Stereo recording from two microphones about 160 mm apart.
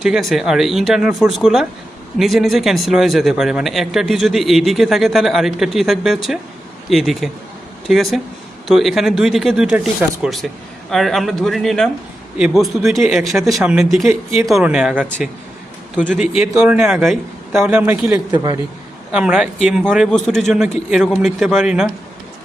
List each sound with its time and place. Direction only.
0.0 s a man's voice: centre (ahead or behind)
18.3 s a man's voice: 25° right (ahead or behind)
19.1 s speech: 5° right (ahead or behind)